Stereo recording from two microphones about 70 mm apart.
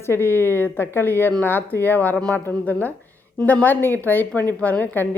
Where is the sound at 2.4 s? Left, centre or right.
Left.